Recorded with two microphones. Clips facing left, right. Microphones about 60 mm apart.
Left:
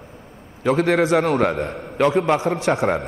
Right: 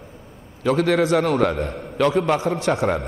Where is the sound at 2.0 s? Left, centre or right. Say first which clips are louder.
Left 1 dB; centre.